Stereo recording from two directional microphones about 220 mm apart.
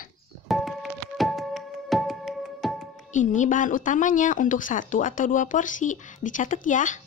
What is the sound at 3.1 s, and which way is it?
Speech, 35° left (ahead or behind).